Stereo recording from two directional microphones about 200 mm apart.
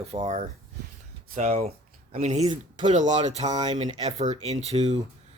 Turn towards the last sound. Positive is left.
turn(degrees=-35)  # may be behind; listen again after turning